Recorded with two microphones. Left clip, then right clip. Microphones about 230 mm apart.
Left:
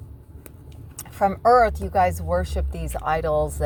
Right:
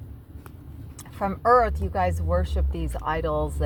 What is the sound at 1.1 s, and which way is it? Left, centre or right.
Speech, left.